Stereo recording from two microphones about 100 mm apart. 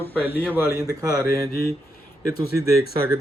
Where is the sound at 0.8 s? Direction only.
35° right (ahead or behind).